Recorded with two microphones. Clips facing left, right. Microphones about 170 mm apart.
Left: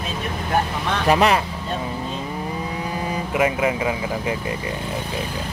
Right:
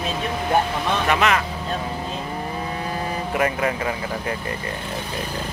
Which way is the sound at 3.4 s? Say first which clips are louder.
Left 3 dB; 10° left (ahead or behind).